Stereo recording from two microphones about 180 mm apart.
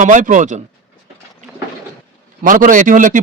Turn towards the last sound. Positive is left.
turn(degrees=-45)  # may be behind; listen again after turning